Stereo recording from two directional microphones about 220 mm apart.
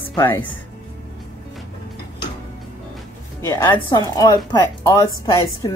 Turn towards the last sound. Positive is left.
turn(degrees=15)  # may be behind; listen again after turning